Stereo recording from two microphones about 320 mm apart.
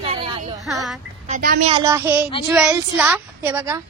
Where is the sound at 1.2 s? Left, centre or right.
Right.